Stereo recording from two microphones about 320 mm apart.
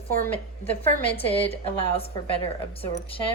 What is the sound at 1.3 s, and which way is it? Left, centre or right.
Speech, centre.